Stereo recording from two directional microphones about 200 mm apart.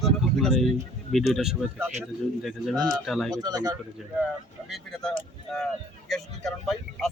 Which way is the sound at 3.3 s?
20° right (ahead or behind).